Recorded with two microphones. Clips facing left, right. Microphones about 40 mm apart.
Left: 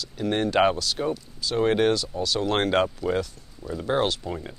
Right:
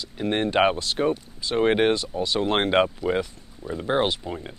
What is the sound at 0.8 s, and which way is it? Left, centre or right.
Speech, right.